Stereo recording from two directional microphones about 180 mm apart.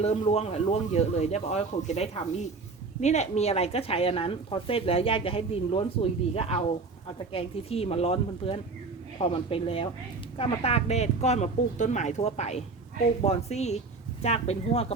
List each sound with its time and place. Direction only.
0.0 s a woman's voice: 35° left (ahead or behind)